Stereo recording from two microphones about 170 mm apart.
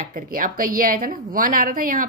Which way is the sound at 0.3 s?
55° right (ahead or behind).